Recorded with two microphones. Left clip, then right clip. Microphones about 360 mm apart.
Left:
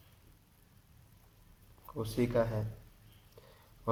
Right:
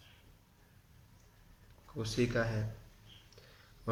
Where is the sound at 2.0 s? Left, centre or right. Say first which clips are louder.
Left 2 dB; centre.